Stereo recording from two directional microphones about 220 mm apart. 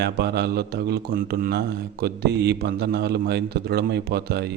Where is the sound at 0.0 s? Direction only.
50° right (ahead or behind).